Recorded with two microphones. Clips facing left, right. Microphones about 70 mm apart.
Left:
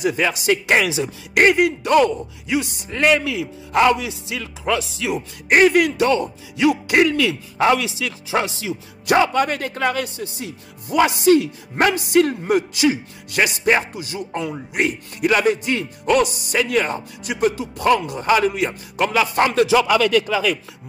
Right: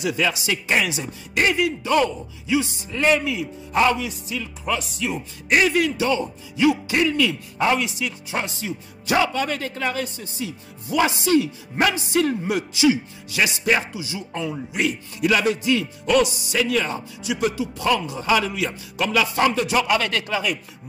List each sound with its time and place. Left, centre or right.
0.0 s speech: left
0.7 s speech: left
1.4 s speech: left
5.5 s speech: left
9.0 s speech: left
19.3 s speech: left